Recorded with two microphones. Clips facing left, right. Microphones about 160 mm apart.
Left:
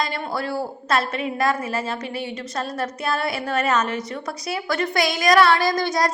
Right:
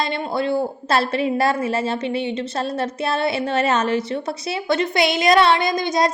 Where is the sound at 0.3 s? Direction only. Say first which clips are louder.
Right 6 dB; 25° right (ahead or behind).